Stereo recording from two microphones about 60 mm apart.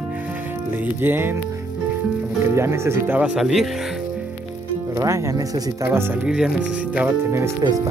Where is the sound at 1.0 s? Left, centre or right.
Right.